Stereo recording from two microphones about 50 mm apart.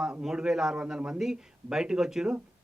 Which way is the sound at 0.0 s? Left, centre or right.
Centre.